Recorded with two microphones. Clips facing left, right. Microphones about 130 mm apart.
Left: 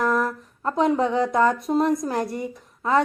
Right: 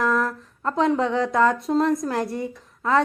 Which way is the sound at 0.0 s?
20° left (ahead or behind).